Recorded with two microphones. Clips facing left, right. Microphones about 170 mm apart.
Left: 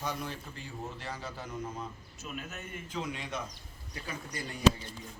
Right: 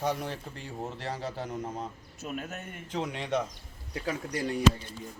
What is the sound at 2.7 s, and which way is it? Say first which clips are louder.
A man's voice: right 3 dB; 70° right (ahead or behind).